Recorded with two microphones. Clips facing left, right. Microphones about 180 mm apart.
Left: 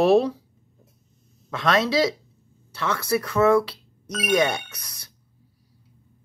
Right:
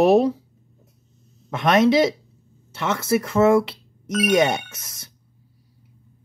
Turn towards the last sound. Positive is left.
turn(degrees=-25)  # may be behind; listen again after turning